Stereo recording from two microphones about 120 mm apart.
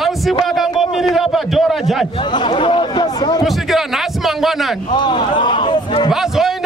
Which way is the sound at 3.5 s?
Centre (ahead or behind).